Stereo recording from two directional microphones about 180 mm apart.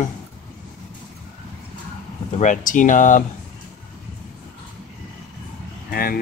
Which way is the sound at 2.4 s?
45° left (ahead or behind).